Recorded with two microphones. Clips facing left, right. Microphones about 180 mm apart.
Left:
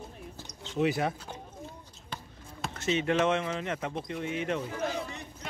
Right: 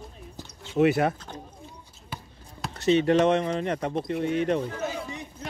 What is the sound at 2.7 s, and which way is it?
Speech, 35° right (ahead or behind).